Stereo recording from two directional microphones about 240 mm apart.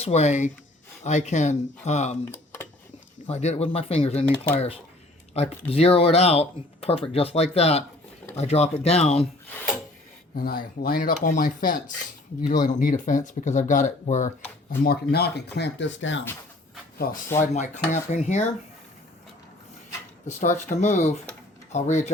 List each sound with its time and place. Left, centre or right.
0.0 s speech: left
2.3 s tick-tock: centre
3.2 s speech: left
5.3 s speech: left
10.3 s speech: left
14.8 s speech: left
17.0 s speech: left
20.7 s speech: left